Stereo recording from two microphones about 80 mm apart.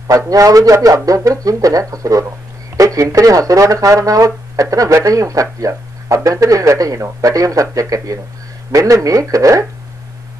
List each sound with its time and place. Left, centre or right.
0.1 s speech: right